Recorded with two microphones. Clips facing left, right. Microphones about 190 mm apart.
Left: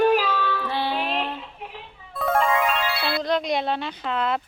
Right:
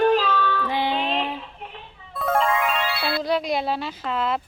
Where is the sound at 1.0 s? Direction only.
10° right (ahead or behind).